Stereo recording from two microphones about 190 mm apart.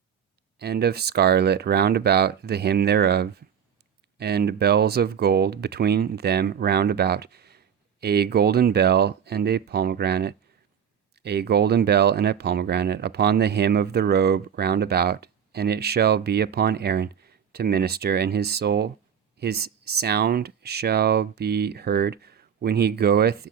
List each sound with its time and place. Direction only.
0.6 s speech: 60° right (ahead or behind)